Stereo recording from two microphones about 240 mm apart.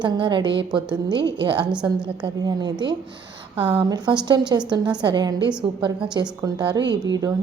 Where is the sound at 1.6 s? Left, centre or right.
Centre.